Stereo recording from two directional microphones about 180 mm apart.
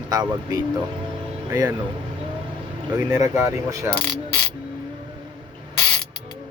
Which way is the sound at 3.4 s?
15° right (ahead or behind).